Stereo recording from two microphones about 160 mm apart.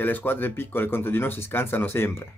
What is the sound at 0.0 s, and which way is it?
Speech, 10° left (ahead or behind).